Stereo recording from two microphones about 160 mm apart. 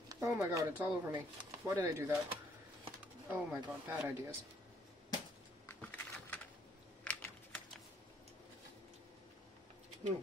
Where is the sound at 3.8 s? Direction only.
15° right (ahead or behind).